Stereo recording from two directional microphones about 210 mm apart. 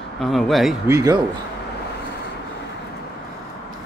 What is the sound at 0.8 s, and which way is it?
Speech, 15° right (ahead or behind).